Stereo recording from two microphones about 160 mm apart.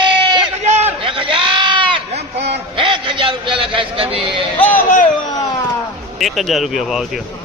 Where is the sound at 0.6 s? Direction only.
45° right (ahead or behind).